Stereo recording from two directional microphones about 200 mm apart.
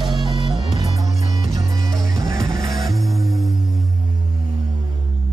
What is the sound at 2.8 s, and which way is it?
Music, centre (ahead or behind).